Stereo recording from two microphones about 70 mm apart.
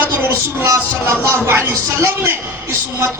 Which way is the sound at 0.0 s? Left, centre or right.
Right.